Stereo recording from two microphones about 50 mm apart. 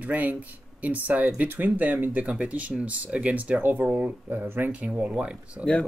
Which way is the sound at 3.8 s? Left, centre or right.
Right.